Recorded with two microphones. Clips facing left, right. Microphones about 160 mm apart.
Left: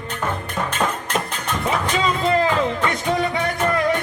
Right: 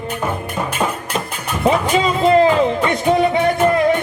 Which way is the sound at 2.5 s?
15° right (ahead or behind).